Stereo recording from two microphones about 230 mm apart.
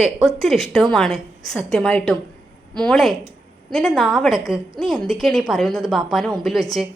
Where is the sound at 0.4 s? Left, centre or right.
Centre.